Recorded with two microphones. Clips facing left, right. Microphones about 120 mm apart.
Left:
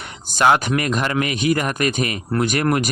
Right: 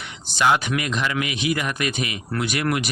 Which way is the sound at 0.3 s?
45° left (ahead or behind).